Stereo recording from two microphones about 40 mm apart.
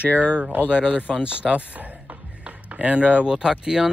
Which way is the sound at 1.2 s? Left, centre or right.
Right.